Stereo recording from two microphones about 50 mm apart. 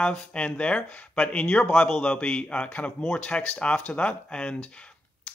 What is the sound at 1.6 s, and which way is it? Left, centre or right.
Speech, left.